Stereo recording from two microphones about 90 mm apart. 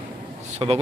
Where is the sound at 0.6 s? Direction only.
70° right (ahead or behind).